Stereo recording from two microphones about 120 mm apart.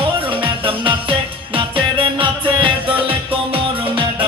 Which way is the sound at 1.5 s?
50° right (ahead or behind).